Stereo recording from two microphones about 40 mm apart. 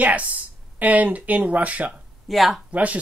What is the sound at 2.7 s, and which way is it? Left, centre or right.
Speech, right.